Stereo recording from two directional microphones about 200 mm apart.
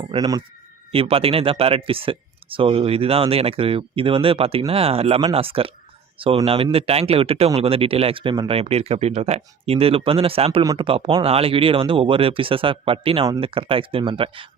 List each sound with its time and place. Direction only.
0.0 s speech: 25° right (ahead or behind)